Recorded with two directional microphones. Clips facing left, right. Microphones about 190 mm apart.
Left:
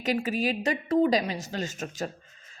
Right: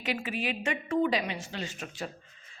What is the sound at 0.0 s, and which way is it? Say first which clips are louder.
A woman's voice: left 6 dB; 40° left (ahead or behind).